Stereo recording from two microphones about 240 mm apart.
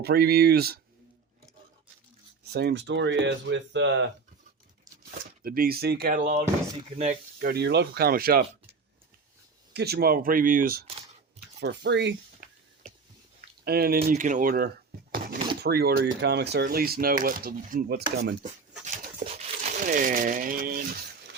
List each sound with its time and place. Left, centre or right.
0.0 s speech: right
2.5 s speech: right
5.4 s speech: right
7.3 s speech: right
9.7 s speech: right
13.7 s speech: right
19.2 s a sound: right